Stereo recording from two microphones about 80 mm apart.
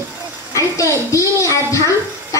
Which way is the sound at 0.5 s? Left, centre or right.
Left.